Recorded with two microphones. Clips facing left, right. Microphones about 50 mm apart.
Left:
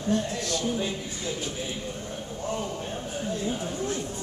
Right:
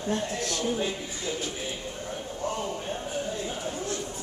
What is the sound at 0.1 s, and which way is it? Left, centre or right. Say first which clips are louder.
Speech: left 3 dB; right.